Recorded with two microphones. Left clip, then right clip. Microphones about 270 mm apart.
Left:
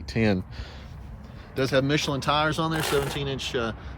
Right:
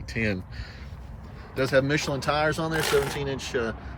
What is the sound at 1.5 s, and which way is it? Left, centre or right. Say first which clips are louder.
Speech: right 1 dB; centre.